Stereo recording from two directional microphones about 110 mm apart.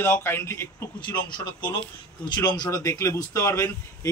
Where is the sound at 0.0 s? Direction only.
20° left (ahead or behind).